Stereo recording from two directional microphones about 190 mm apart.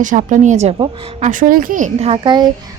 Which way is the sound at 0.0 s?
40° right (ahead or behind).